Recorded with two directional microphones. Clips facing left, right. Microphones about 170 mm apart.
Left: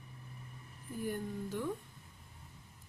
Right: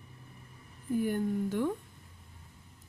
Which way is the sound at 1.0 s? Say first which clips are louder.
Right 7 dB; 65° right (ahead or behind).